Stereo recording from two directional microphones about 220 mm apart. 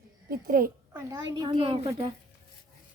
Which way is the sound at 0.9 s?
10° right (ahead or behind).